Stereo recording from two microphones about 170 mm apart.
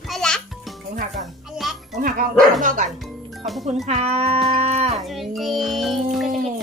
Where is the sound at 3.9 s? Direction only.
35° right (ahead or behind).